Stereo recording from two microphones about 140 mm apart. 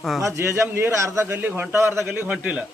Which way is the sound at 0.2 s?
20° right (ahead or behind).